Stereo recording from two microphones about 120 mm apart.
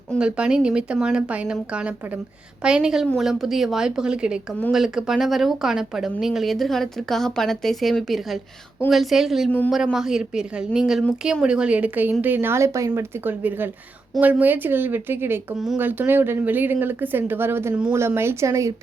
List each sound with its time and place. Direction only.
0.2 s speech: 10° right (ahead or behind)
15.5 s speech: 5° right (ahead or behind)
15.8 s speech: 15° right (ahead or behind)